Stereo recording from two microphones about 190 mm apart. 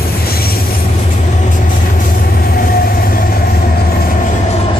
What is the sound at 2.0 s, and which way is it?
Train, 50° left (ahead or behind).